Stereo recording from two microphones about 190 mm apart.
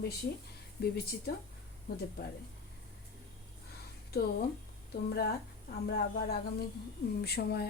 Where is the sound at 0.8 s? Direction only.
55° left (ahead or behind).